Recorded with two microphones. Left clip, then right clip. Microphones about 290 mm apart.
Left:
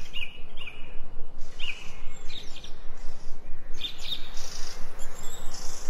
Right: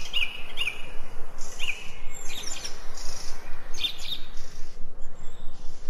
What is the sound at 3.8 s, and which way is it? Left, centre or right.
Bird, centre.